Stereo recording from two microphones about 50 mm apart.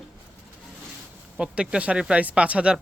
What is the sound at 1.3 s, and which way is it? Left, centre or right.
Speech, centre.